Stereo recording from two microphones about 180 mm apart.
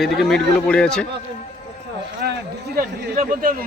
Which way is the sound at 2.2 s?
65° right (ahead or behind).